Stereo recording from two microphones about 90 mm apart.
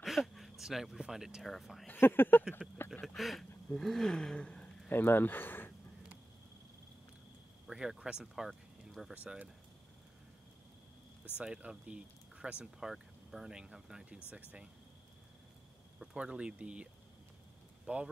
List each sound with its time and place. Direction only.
0.0 s speech: centre (ahead or behind)
1.9 s speech: 25° left (ahead or behind)
3.2 s speech: centre (ahead or behind)
4.8 s speech: 25° left (ahead or behind)
7.6 s speech: 5° right (ahead or behind)
8.5 s a sound: centre (ahead or behind)
9.1 s speech: 15° right (ahead or behind)
11.3 s speech: 10° right (ahead or behind)
16.0 s speech: 10° right (ahead or behind)